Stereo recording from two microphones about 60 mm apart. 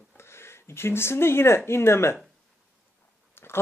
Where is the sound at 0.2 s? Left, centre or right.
Left.